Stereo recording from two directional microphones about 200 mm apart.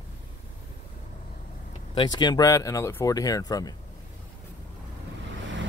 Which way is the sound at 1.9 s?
20° left (ahead or behind).